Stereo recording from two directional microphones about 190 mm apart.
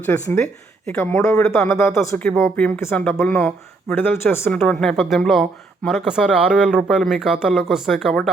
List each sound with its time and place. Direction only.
0.0 s speech: 10° left (ahead or behind)